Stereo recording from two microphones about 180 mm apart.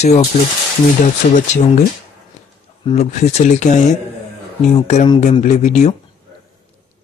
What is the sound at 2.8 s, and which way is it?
Speech, 40° left (ahead or behind).